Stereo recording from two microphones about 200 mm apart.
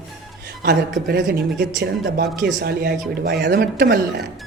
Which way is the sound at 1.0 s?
50° right (ahead or behind).